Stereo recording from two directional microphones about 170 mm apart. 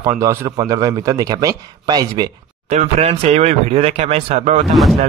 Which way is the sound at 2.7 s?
40° right (ahead or behind).